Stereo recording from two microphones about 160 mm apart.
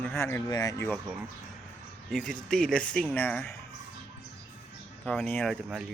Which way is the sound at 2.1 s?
5° left (ahead or behind).